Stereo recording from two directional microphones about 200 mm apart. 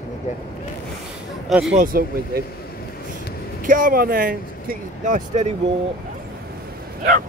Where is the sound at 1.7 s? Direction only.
45° right (ahead or behind).